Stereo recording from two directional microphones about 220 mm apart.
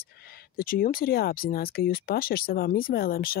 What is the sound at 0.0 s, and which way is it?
Speech, 45° left (ahead or behind).